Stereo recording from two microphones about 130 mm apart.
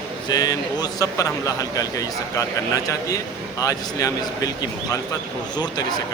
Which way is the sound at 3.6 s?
25° left (ahead or behind).